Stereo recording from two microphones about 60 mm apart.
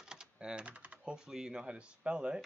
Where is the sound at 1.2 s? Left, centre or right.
Centre.